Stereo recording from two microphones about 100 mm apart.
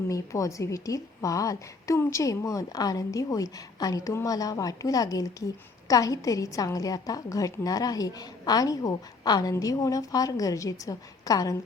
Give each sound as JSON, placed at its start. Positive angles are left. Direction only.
{"t": 0.1, "sound": "a woman's voice", "side_deg": 30}